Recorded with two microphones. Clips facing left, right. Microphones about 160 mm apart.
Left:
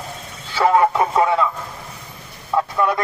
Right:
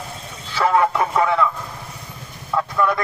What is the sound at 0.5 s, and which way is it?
Vehicle, 20° left (ahead or behind).